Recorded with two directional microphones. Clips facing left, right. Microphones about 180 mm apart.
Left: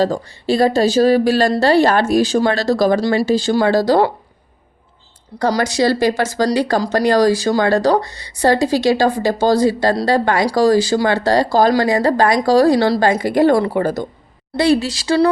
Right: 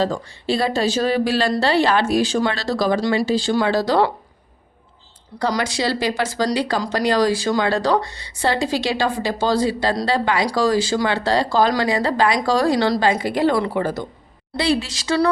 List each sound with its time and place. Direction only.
0.0 s speech: 40° left (ahead or behind)
5.5 s speech: 40° left (ahead or behind)